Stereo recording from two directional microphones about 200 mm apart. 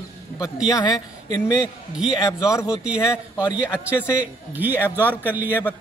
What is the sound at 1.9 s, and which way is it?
Speech, 5° right (ahead or behind).